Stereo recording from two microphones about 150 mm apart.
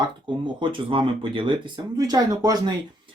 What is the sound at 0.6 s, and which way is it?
Speech, 35° right (ahead or behind).